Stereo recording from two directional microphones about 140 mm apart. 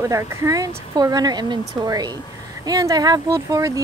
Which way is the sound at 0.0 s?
20° right (ahead or behind).